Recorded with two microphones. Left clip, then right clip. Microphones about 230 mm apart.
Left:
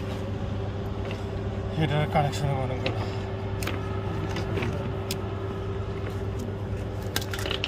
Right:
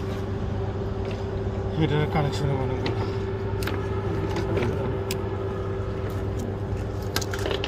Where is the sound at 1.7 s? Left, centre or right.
Left.